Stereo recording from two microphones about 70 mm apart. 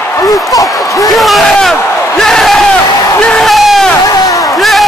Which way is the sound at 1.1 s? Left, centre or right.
Centre.